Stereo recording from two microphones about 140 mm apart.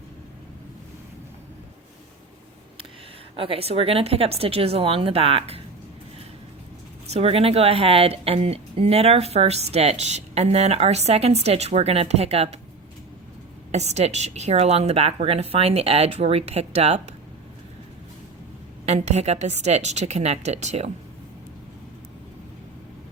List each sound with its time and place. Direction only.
3.3 s speech: 40° right (ahead or behind)
7.1 s speech: 45° right (ahead or behind)
13.7 s speech: 50° right (ahead or behind)
18.9 s speech: 55° right (ahead or behind)